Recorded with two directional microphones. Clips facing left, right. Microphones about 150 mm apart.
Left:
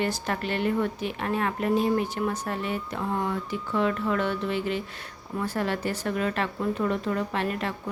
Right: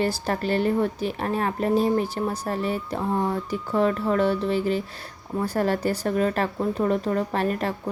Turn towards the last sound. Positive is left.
turn(degrees=-40)  # may be behind; listen again after turning